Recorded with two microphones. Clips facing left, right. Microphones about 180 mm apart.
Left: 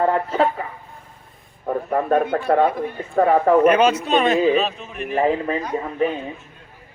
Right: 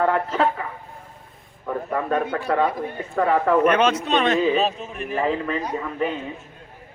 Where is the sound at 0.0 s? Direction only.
30° left (ahead or behind).